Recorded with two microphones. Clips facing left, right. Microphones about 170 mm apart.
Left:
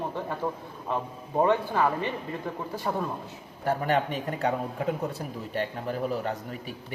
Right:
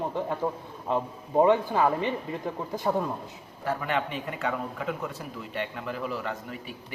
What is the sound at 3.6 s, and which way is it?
Speech, 35° left (ahead or behind).